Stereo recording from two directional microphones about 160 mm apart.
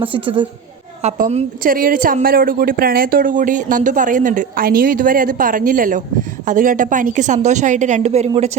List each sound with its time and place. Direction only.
0.0 s a woman's voice: 30° right (ahead or behind)
1.0 s a woman's voice: 45° right (ahead or behind)
1.6 s a woman's voice: 60° right (ahead or behind); by 8.3 s 45° right (ahead or behind)